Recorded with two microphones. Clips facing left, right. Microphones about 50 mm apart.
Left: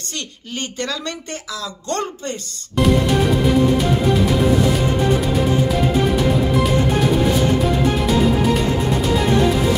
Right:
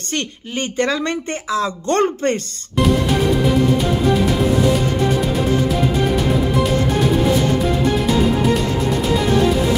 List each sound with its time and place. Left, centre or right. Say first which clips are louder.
0.1 s speech: right 6 dB; right